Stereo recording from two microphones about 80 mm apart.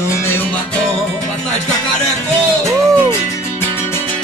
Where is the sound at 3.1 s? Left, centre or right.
Left.